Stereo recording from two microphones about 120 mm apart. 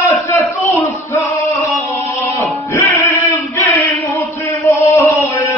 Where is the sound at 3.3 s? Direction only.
25° left (ahead or behind).